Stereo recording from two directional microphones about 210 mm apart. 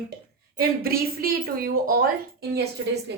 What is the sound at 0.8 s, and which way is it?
A woman's voice, 45° right (ahead or behind).